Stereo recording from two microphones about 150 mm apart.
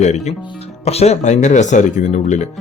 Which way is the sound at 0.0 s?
45° left (ahead or behind).